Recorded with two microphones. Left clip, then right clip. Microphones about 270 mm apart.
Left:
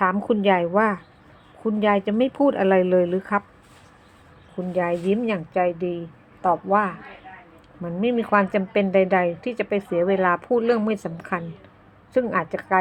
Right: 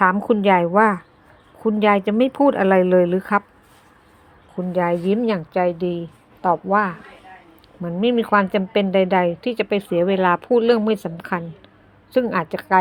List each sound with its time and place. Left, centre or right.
0.0 s speech: centre
4.5 s a woman's voice: centre